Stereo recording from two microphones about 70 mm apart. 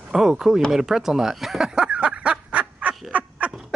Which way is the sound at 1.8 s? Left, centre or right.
Centre.